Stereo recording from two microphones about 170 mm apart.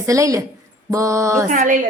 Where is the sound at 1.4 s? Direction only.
50° right (ahead or behind).